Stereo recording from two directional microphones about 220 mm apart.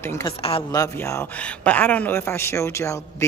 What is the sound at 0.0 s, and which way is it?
Speech, 15° left (ahead or behind).